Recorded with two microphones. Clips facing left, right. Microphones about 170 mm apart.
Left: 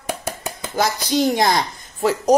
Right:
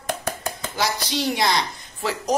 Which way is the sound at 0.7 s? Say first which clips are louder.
Left 7 dB; 50° left (ahead or behind).